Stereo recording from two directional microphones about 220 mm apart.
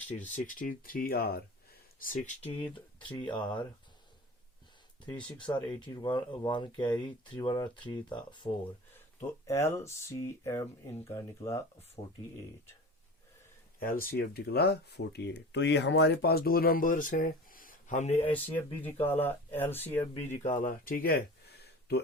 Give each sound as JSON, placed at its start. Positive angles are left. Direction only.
{"t": 0.3, "sound": "speech", "side_deg": 35}
{"t": 5.4, "sound": "speech", "side_deg": 20}
{"t": 9.5, "sound": "speech", "side_deg": 10}
{"t": 13.7, "sound": "speech", "side_deg": 40}
{"t": 19.0, "sound": "speech", "side_deg": 10}
{"t": 20.4, "sound": "speech", "side_deg": 35}
{"t": 21.6, "sound": "a sound", "side_deg": 50}